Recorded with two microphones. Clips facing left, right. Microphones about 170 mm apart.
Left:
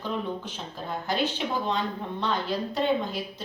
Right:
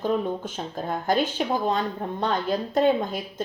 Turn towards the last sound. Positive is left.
turn(degrees=-45)  # may be behind; listen again after turning